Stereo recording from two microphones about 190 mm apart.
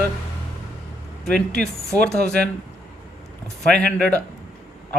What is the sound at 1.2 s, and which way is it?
Speech, 5° left (ahead or behind).